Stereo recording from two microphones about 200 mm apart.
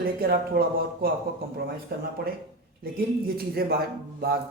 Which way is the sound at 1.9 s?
50° right (ahead or behind).